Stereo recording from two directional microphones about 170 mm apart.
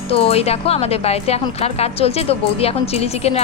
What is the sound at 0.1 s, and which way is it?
A woman's voice, 35° left (ahead or behind).